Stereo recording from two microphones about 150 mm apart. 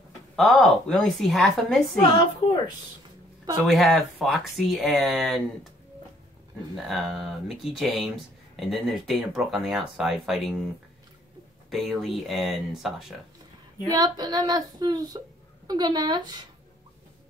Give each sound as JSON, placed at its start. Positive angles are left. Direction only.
{"t": 0.4, "sound": "speech", "side_deg": 0}
{"t": 3.6, "sound": "speech", "side_deg": 0}
{"t": 6.8, "sound": "speech", "side_deg": 0}
{"t": 11.7, "sound": "speech", "side_deg": 0}
{"t": 13.8, "sound": "a sound", "side_deg": -25}